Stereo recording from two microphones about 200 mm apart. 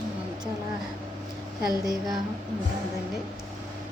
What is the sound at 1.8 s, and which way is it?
Speech, 20° right (ahead or behind).